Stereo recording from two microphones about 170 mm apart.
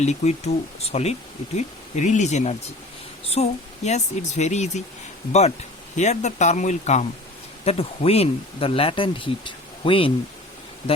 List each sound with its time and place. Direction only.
0.0 s speech: 40° left (ahead or behind)